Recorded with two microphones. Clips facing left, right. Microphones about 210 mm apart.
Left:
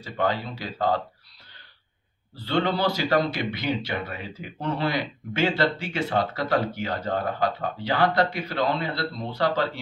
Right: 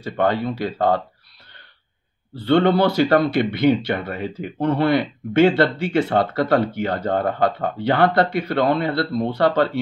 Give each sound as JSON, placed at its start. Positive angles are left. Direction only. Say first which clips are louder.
{"t": 0.0, "sound": "speech", "louder": "right 6 dB", "side_deg": -60}
{"t": 2.4, "sound": "speech", "louder": "right 8 dB", "side_deg": -55}